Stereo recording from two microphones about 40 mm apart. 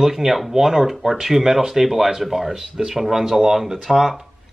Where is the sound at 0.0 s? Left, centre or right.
Centre.